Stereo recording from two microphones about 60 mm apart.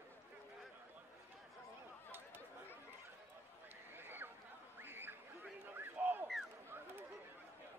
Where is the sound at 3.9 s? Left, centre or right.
Right.